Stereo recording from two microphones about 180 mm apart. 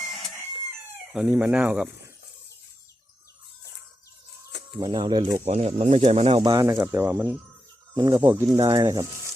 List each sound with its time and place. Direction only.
1.1 s speech: 10° right (ahead or behind)
4.8 s speech: 25° right (ahead or behind)
5.5 s speech: 35° right (ahead or behind)
6.5 s speech: 20° right (ahead or behind)
7.9 s speech: 20° right (ahead or behind)